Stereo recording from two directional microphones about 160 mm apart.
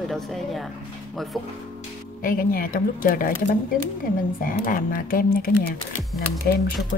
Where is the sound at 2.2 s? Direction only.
60° left (ahead or behind).